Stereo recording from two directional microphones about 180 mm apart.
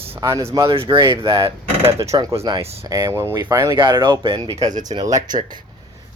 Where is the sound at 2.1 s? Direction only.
20° right (ahead or behind).